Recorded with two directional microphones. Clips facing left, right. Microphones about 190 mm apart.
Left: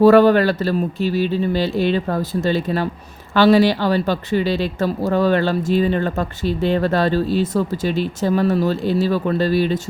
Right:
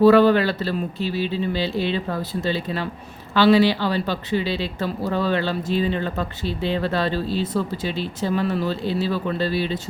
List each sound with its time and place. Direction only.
0.0 s speech: 45° left (ahead or behind)